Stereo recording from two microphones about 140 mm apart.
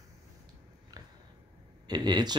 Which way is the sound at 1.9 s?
30° right (ahead or behind).